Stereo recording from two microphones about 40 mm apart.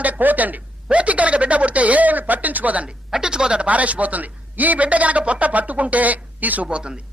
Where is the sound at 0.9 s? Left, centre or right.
Right.